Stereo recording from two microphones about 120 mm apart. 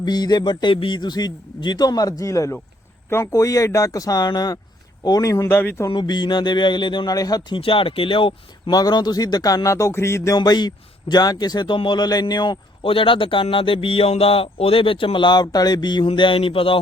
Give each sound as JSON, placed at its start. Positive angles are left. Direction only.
{"t": 0.0, "sound": "a man's voice", "side_deg": 35}
{"t": 5.9, "sound": "a man's voice", "side_deg": 40}
{"t": 7.6, "sound": "a man's voice", "side_deg": 50}
{"t": 8.7, "sound": "a man's voice", "side_deg": 35}
{"t": 10.3, "sound": "a man's voice", "side_deg": 35}